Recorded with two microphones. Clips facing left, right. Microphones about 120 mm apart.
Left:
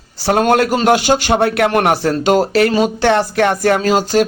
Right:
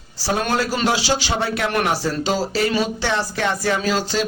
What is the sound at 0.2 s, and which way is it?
A man's voice, 60° left (ahead or behind).